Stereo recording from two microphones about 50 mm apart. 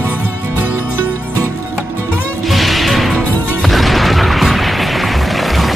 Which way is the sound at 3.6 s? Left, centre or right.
Centre.